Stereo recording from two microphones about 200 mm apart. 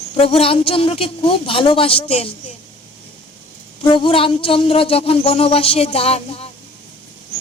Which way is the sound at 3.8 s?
25° left (ahead or behind).